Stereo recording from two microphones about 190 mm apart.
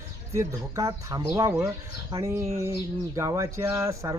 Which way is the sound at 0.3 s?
15° right (ahead or behind).